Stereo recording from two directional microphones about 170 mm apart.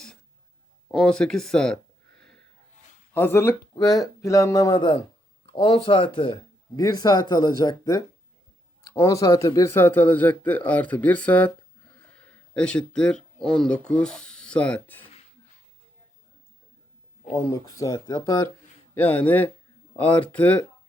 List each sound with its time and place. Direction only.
0.9 s a sound: 5° left (ahead or behind)
3.2 s speech: 15° left (ahead or behind)
17.3 s speech: 20° left (ahead or behind)